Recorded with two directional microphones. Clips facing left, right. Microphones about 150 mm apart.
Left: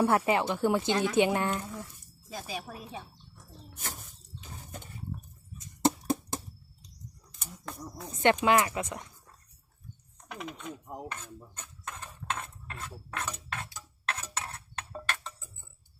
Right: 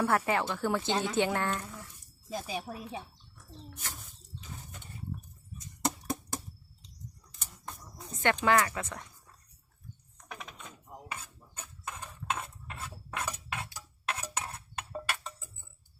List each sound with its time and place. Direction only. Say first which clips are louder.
0.0 s speech: left 3 dB; 20° left (ahead or behind)
2.5 s speech: right 2 dB; 20° right (ahead or behind)
3.3 s bird: right 3 dB; 45° left (ahead or behind)
5.8 s a sound: left 6 dB; 30° left (ahead or behind)
7.6 s a sound: left 5 dB; 90° left
8.4 s speech: left 2 dB; 15° left (ahead or behind)
11.1 s cutlery: left 1 dB; 10° right (ahead or behind)